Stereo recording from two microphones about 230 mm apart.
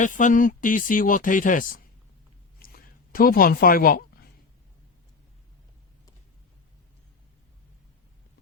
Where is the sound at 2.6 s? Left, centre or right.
Left.